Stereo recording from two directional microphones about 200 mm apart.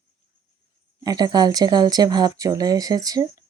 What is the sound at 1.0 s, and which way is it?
Speech, 20° right (ahead or behind).